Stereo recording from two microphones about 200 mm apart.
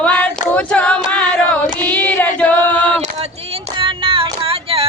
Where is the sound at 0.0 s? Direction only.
5° left (ahead or behind).